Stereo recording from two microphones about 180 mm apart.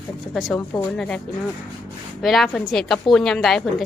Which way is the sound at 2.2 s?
Centre (ahead or behind).